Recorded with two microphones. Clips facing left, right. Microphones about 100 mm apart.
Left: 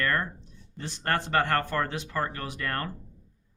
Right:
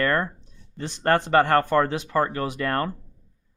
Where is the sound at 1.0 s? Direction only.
30° right (ahead or behind).